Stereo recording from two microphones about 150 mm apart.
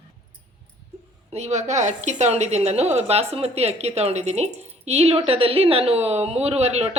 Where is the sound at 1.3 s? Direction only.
50° right (ahead or behind).